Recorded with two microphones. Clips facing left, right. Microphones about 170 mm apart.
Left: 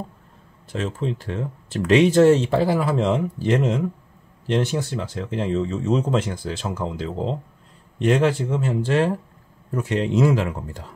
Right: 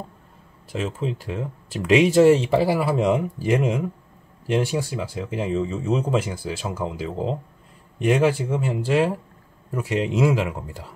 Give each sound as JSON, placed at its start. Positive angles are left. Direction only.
{"t": 0.7, "sound": "speech", "side_deg": -10}